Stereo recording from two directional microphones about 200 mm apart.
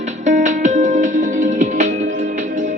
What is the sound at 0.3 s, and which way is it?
Music, 40° right (ahead or behind).